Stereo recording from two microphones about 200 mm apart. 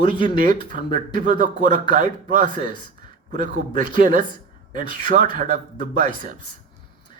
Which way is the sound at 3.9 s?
45° right (ahead or behind).